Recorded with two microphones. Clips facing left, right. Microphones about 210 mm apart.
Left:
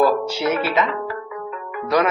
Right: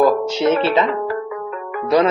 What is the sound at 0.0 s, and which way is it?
Speech, 20° right (ahead or behind).